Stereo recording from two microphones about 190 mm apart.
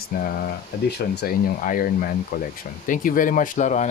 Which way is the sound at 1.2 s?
50° left (ahead or behind).